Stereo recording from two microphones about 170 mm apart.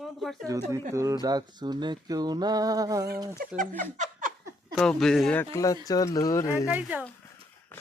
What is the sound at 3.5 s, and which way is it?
Speech, 50° right (ahead or behind).